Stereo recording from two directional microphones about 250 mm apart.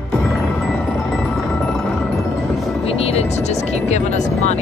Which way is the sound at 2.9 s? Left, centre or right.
Left.